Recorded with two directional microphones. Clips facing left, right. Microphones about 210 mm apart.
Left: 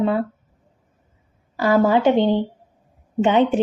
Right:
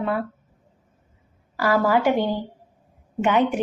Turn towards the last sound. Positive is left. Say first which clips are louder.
# left 4 dB
turn(degrees=30)  # may be behind; listen again after turning